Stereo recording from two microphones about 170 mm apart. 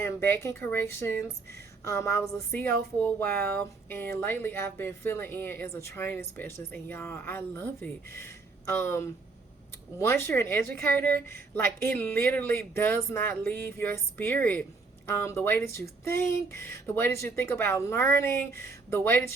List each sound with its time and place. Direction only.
0.0 s speech: 15° left (ahead or behind)